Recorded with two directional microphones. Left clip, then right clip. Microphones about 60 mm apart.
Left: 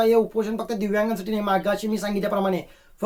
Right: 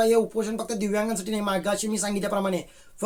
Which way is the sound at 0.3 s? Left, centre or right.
Right.